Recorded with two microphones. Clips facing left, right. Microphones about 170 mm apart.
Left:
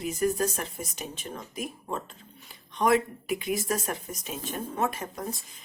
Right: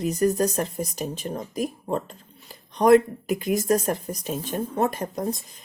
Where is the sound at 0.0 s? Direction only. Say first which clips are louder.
Right 5 dB; 40° right (ahead or behind).